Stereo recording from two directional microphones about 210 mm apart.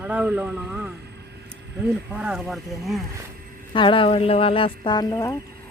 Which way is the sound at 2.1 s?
5° right (ahead or behind).